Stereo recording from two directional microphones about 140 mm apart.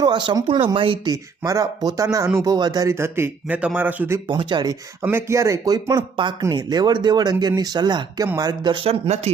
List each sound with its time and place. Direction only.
0.0 s speech: 35° right (ahead or behind)
1.1 s speech: 25° right (ahead or behind)
4.3 s speech: 35° right (ahead or behind)
5.0 s speech: 20° right (ahead or behind); by 9.3 s 50° right (ahead or behind)